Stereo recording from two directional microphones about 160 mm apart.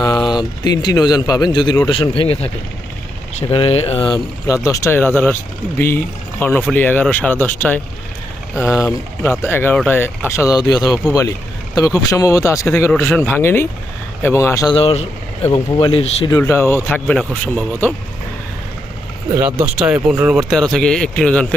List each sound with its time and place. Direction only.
0.0 s speech: 25° left (ahead or behind)
3.5 s speech: 35° left (ahead or behind)
4.4 s speech: 20° left (ahead or behind)
14.8 s speech: 40° left (ahead or behind)
16.4 s speech: 15° left (ahead or behind)
19.4 s speech: 10° right (ahead or behind)
20.5 s speech: 5° left (ahead or behind)